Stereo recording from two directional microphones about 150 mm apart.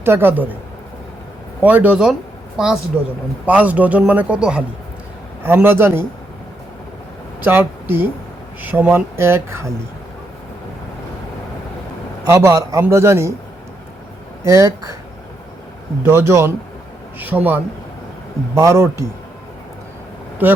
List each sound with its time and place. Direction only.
0.0 s speech: 15° right (ahead or behind)
1.6 s speech: 10° right (ahead or behind)
3.4 s speech: 10° right (ahead or behind)
7.4 s speech: 15° right (ahead or behind)
12.2 s a man's voice: 20° right (ahead or behind)
14.4 s a man's voice: 20° right (ahead or behind)
16.0 s speech: 15° right (ahead or behind)
20.4 s speech: 10° right (ahead or behind)